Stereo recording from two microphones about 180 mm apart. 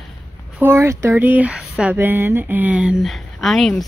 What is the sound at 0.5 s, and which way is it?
Speech, 15° right (ahead or behind).